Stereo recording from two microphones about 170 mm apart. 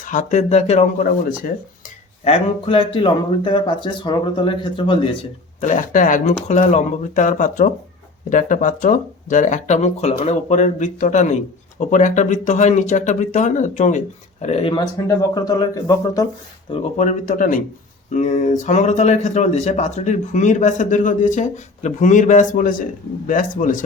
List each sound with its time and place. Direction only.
0.0 s speech: 50° left (ahead or behind)
2.2 s speech: 35° left (ahead or behind)
15.0 s speech: 20° left (ahead or behind)
17.0 s speech: 50° left (ahead or behind)